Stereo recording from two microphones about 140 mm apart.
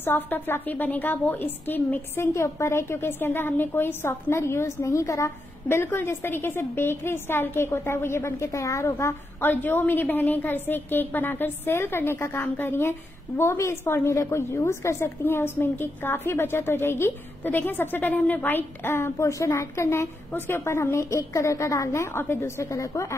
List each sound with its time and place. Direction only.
0.0 s a woman's voice: 15° left (ahead or behind)